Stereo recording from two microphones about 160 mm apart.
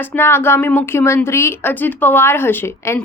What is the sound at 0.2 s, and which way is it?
A woman's voice, 15° left (ahead or behind).